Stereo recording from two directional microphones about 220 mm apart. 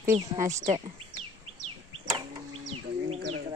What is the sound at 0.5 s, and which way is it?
Speech, 30° right (ahead or behind).